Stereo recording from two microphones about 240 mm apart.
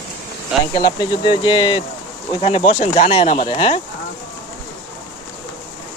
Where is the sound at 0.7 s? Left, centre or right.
Centre.